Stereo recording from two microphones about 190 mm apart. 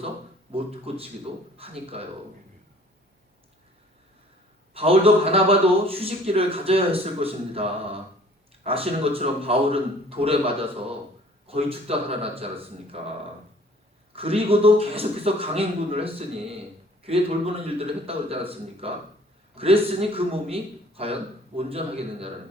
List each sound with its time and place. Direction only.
0.5 s a man's voice: 30° right (ahead or behind)
4.7 s a man's voice: 30° right (ahead or behind)
14.1 s a man's voice: 30° right (ahead or behind)